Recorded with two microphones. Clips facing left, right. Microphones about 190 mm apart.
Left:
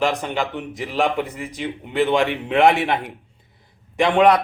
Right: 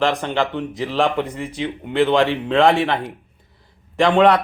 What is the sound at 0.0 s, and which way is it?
Speech, 10° left (ahead or behind).